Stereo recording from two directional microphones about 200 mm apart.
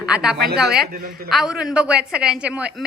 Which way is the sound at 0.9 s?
50° right (ahead or behind).